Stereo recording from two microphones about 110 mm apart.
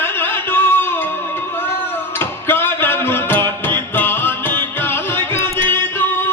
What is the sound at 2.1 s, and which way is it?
Music, 20° left (ahead or behind).